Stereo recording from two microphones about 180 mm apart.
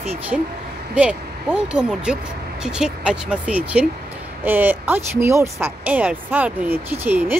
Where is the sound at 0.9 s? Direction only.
5° right (ahead or behind).